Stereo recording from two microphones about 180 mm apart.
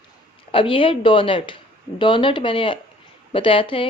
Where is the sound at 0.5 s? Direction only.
30° left (ahead or behind).